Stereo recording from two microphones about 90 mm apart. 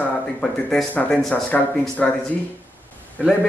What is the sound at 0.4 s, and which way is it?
Speech, 5° left (ahead or behind).